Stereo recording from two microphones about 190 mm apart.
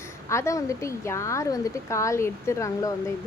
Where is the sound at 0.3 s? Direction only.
15° left (ahead or behind).